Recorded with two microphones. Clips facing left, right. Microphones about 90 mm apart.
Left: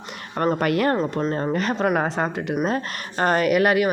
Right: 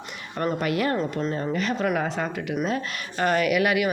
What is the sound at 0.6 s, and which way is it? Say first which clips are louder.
A woman's voice: left 3 dB; 50° left (ahead or behind).